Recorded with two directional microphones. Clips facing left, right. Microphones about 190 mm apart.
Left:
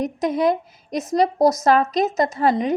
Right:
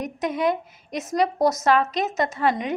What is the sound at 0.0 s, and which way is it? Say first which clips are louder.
A woman's voice: left 4 dB; 35° left (ahead or behind).